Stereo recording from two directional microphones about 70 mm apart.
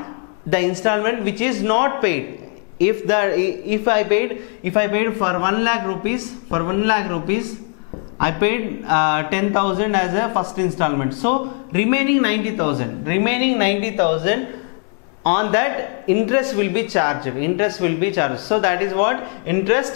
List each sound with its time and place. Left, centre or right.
0.5 s speech: centre